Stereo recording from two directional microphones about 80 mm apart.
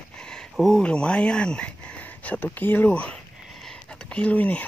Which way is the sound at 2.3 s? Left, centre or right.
Left.